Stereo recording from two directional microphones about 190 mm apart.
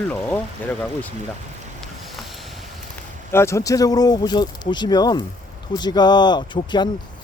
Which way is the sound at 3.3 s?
15° left (ahead or behind).